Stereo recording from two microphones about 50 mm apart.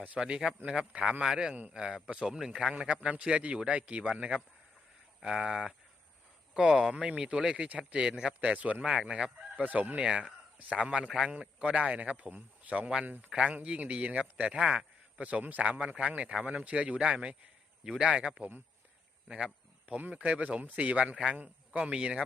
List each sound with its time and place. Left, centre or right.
0.2 s speech: centre
0.7 s a man's voice: right
6.9 s a man's voice: right
8.4 s a man's voice: right
8.9 s speech: centre
9.6 s a man's voice: right; by 14.8 s centre
15.2 s a man's voice: right
16.3 s a man's voice: centre
20.1 s a man's voice: right